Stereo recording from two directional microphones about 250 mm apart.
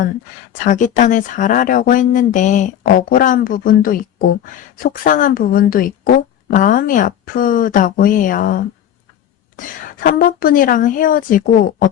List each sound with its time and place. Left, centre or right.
0.6 s a woman's voice: left